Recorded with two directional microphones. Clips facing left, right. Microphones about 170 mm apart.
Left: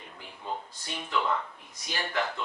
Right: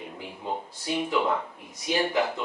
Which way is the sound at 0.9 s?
10° right (ahead or behind).